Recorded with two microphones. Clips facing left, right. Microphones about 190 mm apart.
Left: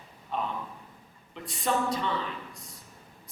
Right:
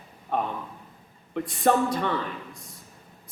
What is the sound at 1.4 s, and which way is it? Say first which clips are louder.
Speech: right 7 dB; 50° right (ahead or behind).